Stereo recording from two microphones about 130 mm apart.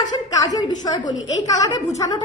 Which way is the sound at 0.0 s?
30° left (ahead or behind).